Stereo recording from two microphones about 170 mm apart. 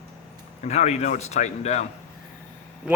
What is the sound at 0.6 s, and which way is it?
A man's voice, 40° left (ahead or behind).